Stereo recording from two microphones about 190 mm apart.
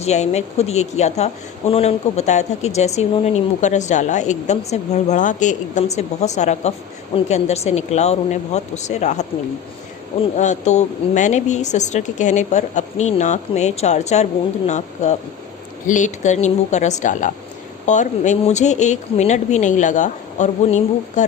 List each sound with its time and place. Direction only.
0.0 s a woman's voice: 35° left (ahead or behind)
10.3 s a woman's voice: 40° left (ahead or behind)